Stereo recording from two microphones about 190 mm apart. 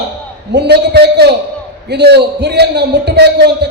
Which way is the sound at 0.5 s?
60° right (ahead or behind).